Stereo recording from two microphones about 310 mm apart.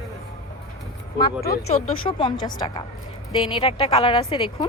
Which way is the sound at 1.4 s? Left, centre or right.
Left.